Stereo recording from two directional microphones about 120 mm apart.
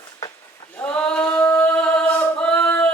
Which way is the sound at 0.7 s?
10° left (ahead or behind).